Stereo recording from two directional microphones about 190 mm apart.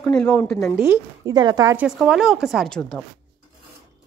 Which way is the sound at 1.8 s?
5° right (ahead or behind).